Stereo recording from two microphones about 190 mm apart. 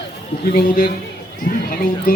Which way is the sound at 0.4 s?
50° left (ahead or behind).